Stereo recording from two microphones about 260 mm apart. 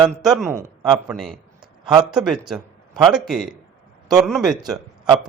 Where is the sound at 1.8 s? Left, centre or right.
Centre.